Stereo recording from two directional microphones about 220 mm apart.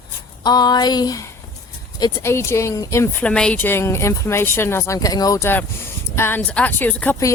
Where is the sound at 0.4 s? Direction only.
20° left (ahead or behind).